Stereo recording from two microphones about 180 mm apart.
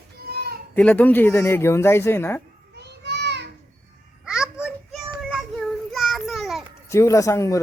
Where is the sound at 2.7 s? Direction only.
70° right (ahead or behind).